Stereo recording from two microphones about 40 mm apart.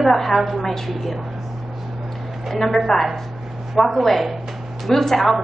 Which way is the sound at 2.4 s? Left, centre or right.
Centre.